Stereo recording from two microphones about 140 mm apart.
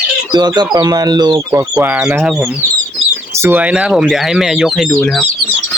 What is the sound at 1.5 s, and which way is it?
Speech, 10° right (ahead or behind).